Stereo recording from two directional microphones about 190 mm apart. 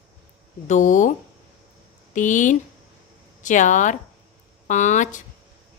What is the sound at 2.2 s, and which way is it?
A woman's voice, 40° left (ahead or behind).